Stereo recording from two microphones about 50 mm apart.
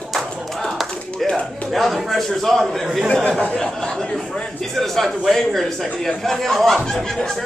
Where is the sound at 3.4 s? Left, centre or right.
Centre.